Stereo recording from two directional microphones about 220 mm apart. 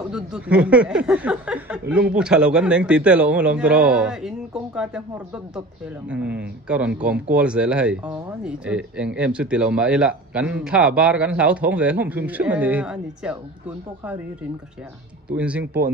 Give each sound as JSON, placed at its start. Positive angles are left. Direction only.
{"t": 0.1, "sound": "speech", "side_deg": -5}
{"t": 6.0, "sound": "speech", "side_deg": -5}
{"t": 15.2, "sound": "speech", "side_deg": -5}